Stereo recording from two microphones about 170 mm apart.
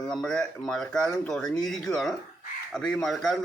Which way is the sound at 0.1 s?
5° left (ahead or behind).